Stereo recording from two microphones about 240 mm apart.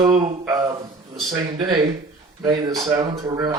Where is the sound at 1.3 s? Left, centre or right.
Centre.